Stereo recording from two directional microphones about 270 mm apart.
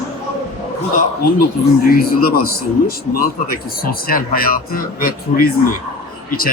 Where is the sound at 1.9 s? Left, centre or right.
Left.